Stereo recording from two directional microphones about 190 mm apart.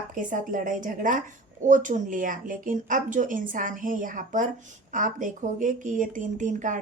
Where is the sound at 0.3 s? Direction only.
45° right (ahead or behind).